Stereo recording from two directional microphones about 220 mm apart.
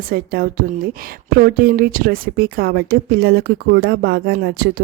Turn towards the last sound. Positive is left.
turn(degrees=-45)  # may be behind; listen again after turning